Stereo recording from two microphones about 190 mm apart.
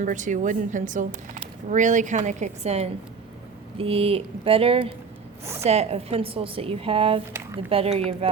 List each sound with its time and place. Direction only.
0.0 s a woman's voice: 40° right (ahead or behind)